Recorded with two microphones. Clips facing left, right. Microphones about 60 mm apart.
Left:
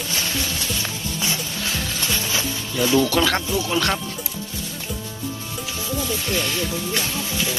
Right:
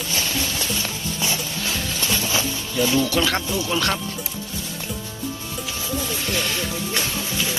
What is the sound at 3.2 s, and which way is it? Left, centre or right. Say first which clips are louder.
Speech: left 2 dB; left.